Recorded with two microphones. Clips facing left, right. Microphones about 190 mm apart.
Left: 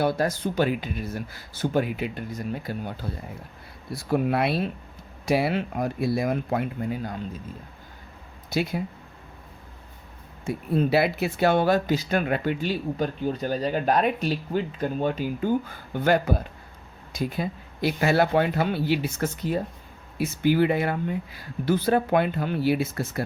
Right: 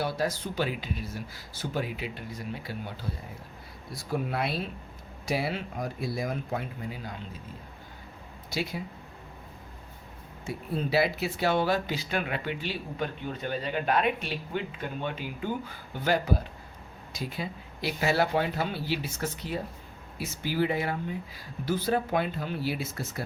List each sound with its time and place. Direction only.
0.0 s speech: 55° left (ahead or behind)
3.9 s speech: 65° left (ahead or behind); by 7.2 s 50° left (ahead or behind)
8.4 s speech: 50° left (ahead or behind)
10.4 s speech: 55° left (ahead or behind)